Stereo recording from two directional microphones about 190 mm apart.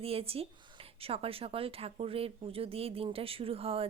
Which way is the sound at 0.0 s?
30° right (ahead or behind).